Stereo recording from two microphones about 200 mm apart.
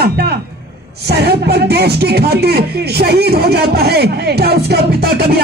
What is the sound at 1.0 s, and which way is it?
Speech, 55° right (ahead or behind).